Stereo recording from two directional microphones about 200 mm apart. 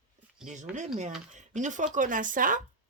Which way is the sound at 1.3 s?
35° right (ahead or behind).